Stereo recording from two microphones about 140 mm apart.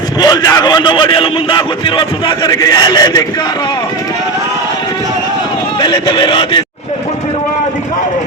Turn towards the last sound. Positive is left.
turn(degrees=35)  # may be behind; listen again after turning